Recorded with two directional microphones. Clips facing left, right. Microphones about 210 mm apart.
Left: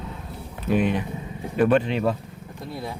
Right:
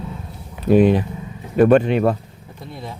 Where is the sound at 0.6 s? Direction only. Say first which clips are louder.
Right 9 dB; 35° right (ahead or behind).